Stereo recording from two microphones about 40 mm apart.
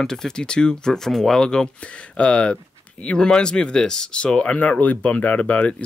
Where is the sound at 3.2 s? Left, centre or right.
Centre.